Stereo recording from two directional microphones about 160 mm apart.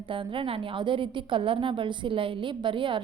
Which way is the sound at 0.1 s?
30° right (ahead or behind).